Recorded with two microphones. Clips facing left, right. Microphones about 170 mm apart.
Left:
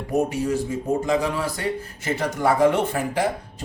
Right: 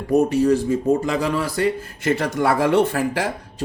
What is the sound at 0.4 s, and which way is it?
A man's voice, 70° right (ahead or behind).